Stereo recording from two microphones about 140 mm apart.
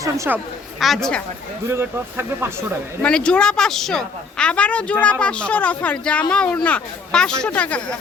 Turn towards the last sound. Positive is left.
turn(degrees=10)  # may be behind; listen again after turning